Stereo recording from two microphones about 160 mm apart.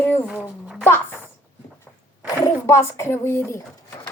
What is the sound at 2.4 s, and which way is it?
Speech, 15° left (ahead or behind).